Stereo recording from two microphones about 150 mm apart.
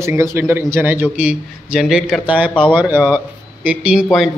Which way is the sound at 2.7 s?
15° right (ahead or behind).